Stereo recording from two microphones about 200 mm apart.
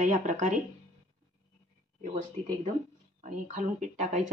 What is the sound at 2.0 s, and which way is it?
A woman's voice, 40° right (ahead or behind).